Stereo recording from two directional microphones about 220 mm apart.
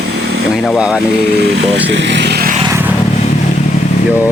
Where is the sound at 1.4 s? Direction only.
50° right (ahead or behind).